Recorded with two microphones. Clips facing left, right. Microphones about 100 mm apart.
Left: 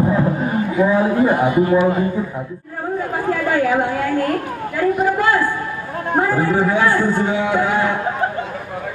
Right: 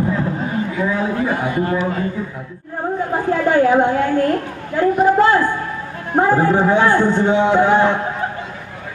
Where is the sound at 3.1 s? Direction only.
25° right (ahead or behind).